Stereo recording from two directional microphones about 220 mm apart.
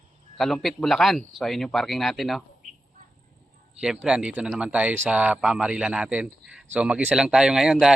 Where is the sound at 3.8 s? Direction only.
5° right (ahead or behind).